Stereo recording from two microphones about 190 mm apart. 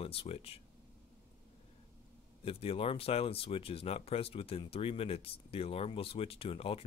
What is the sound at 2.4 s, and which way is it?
Speech, 30° left (ahead or behind).